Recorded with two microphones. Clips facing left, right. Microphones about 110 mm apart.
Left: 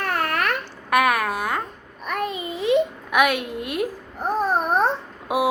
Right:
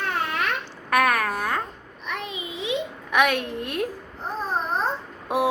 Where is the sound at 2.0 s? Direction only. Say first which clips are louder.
Left 6 dB; 50° left (ahead or behind).